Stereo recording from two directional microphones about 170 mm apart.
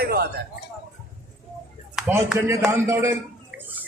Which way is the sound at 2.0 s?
10° right (ahead or behind).